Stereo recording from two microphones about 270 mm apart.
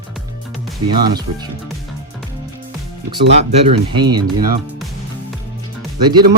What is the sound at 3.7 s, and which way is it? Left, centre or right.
Speech, centre.